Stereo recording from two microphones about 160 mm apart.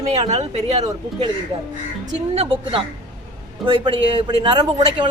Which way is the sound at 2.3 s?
35° right (ahead or behind).